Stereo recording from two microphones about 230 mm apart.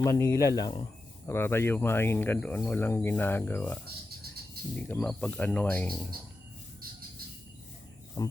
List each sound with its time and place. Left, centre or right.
0.0 s speech: centre
4.8 s speech: centre
6.8 s bird: right
8.2 s speech: centre